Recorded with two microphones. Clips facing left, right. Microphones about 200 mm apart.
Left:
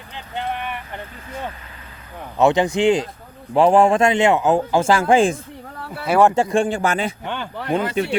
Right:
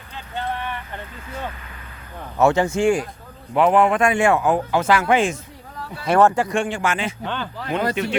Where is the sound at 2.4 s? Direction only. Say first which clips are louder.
Left 1 dB; 15° left (ahead or behind).